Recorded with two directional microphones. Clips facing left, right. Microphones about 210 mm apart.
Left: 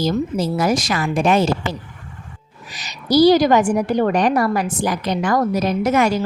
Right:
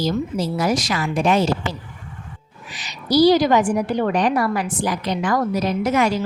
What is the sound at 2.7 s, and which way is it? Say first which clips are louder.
A woman's voice: left 2 dB; 45° left (ahead or behind).